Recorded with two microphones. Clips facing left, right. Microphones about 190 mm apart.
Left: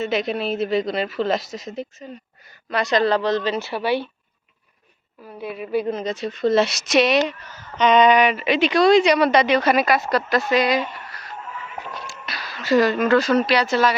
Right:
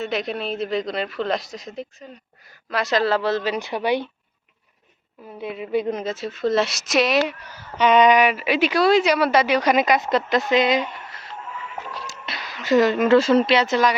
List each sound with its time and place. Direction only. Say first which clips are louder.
0.0 s a woman's voice: left 3 dB; centre (ahead or behind); by 4.1 s 15° right (ahead or behind)
5.4 s a woman's voice: even; 20° right (ahead or behind); by 7.2 s centre (ahead or behind)
7.3 s a woman's voice: even; 10° right (ahead or behind)